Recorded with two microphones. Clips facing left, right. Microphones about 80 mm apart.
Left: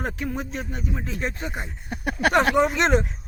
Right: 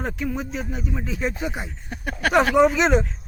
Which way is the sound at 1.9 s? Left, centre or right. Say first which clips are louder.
Left 2 dB; centre.